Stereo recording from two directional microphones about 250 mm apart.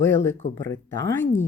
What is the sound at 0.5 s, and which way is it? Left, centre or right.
Speech, centre.